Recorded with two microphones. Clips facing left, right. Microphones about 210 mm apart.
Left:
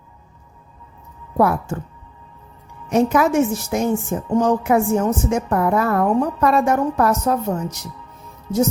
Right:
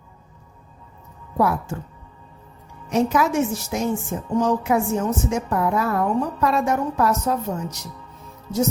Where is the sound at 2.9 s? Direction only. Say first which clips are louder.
Left 4 dB; 55° left (ahead or behind).